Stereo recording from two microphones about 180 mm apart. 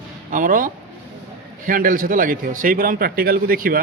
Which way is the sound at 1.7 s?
50° right (ahead or behind).